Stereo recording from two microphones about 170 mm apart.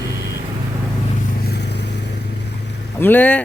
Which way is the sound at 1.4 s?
70° left (ahead or behind).